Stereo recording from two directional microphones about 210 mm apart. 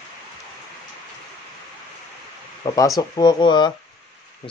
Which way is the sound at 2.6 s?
20° left (ahead or behind).